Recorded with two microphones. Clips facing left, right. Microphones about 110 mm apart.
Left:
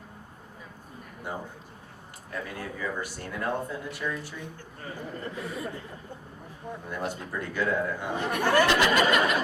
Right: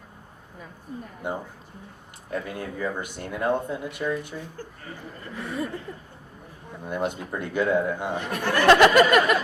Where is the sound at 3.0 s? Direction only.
20° right (ahead or behind).